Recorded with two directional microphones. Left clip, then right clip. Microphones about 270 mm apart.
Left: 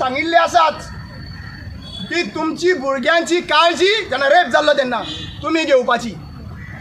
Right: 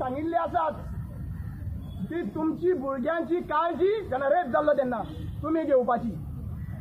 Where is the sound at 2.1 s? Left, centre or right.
Left.